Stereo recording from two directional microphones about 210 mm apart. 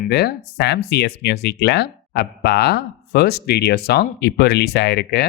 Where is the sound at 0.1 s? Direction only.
50° left (ahead or behind).